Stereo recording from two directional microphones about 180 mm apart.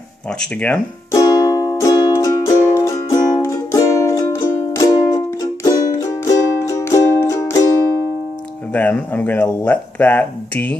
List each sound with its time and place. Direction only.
0.4 s speech: 5° left (ahead or behind)
1.1 s music: 20° left (ahead or behind)
8.7 s speech: 10° left (ahead or behind)